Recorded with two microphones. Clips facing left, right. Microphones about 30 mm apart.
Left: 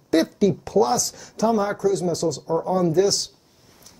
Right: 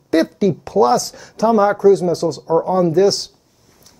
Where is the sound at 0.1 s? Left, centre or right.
Right.